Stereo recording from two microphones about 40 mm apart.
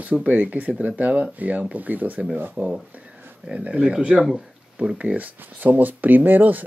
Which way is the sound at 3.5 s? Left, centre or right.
Right.